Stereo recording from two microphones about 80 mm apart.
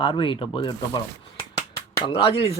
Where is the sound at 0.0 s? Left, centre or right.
Left.